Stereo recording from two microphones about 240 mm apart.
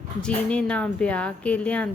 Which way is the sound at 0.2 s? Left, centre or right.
Centre.